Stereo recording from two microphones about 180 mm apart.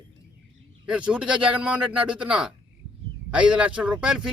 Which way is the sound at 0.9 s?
5° right (ahead or behind).